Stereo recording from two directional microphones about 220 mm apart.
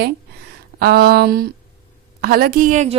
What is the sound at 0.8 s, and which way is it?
A woman's voice, 45° right (ahead or behind).